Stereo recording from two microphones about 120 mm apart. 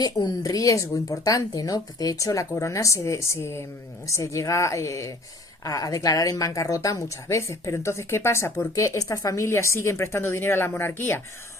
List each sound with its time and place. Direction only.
0.0 s speech: 35° left (ahead or behind); by 11.2 s 20° left (ahead or behind)